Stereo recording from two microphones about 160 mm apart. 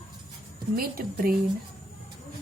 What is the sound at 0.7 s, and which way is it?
Speech, 65° right (ahead or behind).